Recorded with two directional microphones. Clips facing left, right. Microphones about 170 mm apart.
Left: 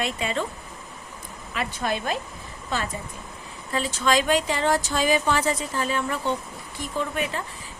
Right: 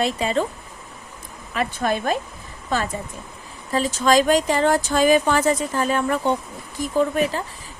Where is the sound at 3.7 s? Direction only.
40° right (ahead or behind).